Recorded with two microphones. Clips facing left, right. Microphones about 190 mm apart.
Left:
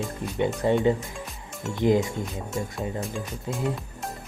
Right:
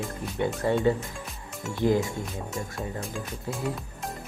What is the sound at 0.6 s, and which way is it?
Speech, 20° left (ahead or behind).